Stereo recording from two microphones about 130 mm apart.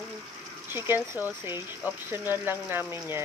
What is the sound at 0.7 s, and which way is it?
Speech, 20° right (ahead or behind).